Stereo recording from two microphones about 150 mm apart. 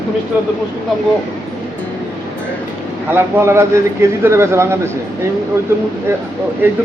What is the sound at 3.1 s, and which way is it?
Speech, 15° right (ahead or behind).